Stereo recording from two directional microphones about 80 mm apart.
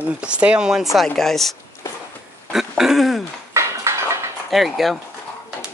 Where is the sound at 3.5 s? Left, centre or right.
Right.